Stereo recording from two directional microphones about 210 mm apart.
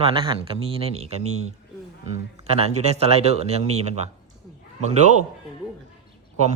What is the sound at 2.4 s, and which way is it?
A man's voice, 30° right (ahead or behind).